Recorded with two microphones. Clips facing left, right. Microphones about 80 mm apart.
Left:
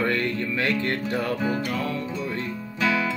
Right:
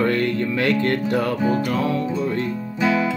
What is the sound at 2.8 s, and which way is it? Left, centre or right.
Music, right.